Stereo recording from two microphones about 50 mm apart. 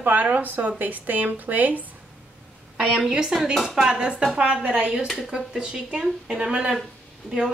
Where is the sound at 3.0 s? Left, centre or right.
Centre.